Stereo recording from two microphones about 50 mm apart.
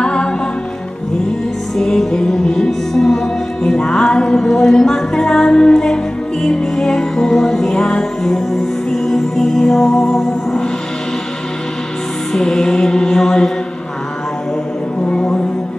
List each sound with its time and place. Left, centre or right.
0.0 s music: centre
1.8 s music: centre
12.3 s music: centre
15.0 s music: centre